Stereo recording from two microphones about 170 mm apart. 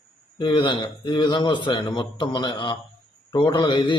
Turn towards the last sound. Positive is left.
turn(degrees=25)  # may be behind; listen again after turning